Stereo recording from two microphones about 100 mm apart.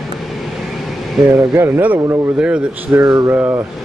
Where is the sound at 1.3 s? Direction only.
25° right (ahead or behind).